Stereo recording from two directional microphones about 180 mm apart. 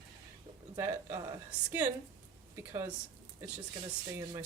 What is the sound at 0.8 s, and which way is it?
A woman's voice, 15° right (ahead or behind).